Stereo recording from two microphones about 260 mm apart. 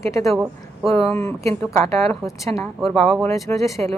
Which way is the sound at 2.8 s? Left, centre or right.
Centre.